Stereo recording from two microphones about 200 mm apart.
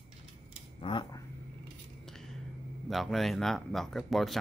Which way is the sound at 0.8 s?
25° left (ahead or behind).